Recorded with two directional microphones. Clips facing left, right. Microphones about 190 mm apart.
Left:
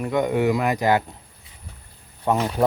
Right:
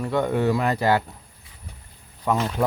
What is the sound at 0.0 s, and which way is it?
Speech, 15° left (ahead or behind).